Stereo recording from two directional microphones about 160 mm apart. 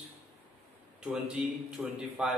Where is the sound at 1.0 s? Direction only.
5° right (ahead or behind).